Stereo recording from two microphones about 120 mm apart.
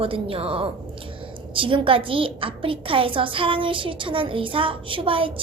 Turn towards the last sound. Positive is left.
turn(degrees=-50)  # may be behind; listen again after turning